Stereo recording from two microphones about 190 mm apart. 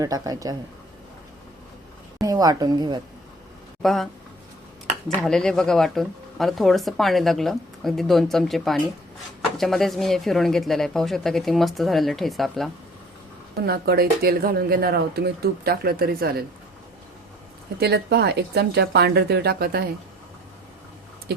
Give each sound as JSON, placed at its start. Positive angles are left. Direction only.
{"t": 0.0, "sound": "speech", "side_deg": -20}
{"t": 2.2, "sound": "speech", "side_deg": -20}
{"t": 3.8, "sound": "speech", "side_deg": 0}
{"t": 13.7, "sound": "speech", "side_deg": -55}
{"t": 17.7, "sound": "speech", "side_deg": -60}